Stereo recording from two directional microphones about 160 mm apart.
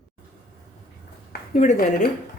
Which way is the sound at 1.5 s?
50° left (ahead or behind).